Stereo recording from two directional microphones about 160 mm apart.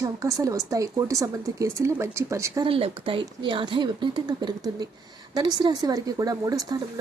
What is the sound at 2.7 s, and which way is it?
Speech, 35° right (ahead or behind).